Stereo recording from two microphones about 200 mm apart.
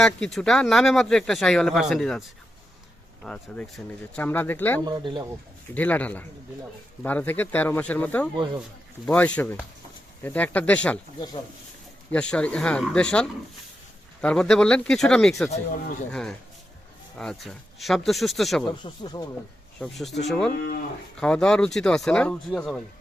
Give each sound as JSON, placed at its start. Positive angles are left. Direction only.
{"t": 0.0, "sound": "speech", "side_deg": 0}
{"t": 3.2, "sound": "speech", "side_deg": 5}
{"t": 4.8, "sound": "speech", "side_deg": -20}
{"t": 5.7, "sound": "speech", "side_deg": 10}
{"t": 12.1, "sound": "speech", "side_deg": 5}
{"t": 17.2, "sound": "speech", "side_deg": 0}
{"t": 18.6, "sound": "speech", "side_deg": 25}
{"t": 19.8, "sound": "speech", "side_deg": 0}
{"t": 20.5, "sound": "speech", "side_deg": 50}
{"t": 21.2, "sound": "speech", "side_deg": 5}